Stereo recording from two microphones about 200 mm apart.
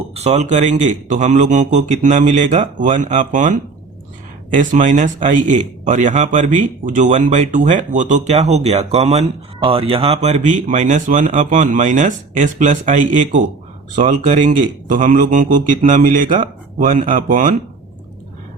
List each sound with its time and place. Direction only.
0.1 s speech: 35° right (ahead or behind)